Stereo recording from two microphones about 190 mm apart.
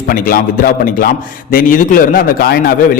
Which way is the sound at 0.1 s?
50° left (ahead or behind).